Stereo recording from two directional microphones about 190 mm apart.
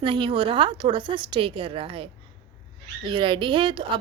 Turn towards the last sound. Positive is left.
turn(degrees=-25)  # may be behind; listen again after turning